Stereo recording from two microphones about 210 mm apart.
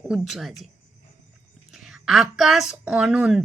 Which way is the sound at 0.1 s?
Centre (ahead or behind).